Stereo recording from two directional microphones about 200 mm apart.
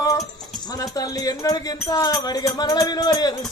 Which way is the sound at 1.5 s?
20° left (ahead or behind).